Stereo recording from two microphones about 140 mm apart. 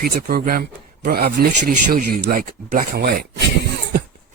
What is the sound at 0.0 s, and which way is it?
Speech, 90° right.